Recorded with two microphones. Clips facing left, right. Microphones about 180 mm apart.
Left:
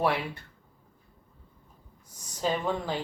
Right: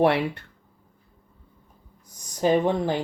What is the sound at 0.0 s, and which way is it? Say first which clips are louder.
Speech: right 7 dB; 70° right (ahead or behind).